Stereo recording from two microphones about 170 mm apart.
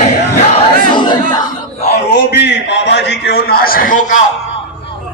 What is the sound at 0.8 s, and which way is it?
Chatter, 25° left (ahead or behind).